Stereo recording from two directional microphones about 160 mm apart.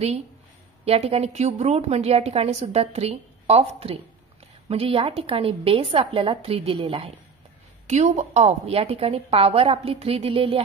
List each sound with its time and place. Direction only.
0.8 s a woman's voice: 40° right (ahead or behind)
7.8 s a woman's voice: 45° right (ahead or behind)